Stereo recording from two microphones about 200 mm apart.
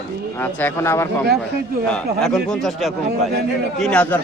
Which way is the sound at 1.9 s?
Centre (ahead or behind).